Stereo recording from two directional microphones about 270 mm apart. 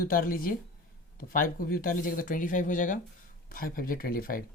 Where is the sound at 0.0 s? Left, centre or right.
Left.